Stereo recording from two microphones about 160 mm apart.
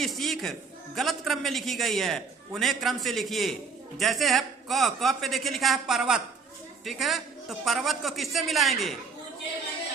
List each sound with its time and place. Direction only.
0.0 s a man's voice: centre (ahead or behind)